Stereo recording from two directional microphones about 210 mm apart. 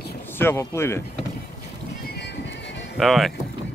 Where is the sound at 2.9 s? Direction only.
Centre (ahead or behind).